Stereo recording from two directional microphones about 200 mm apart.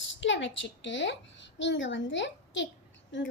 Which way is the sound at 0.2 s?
65° left (ahead or behind).